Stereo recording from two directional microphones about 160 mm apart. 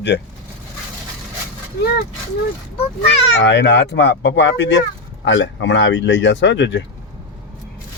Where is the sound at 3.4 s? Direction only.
90° left.